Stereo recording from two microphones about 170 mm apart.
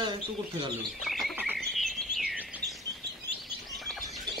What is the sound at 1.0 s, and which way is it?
Bird, centre (ahead or behind).